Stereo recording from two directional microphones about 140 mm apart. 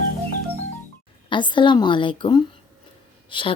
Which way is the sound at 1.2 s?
35° left (ahead or behind).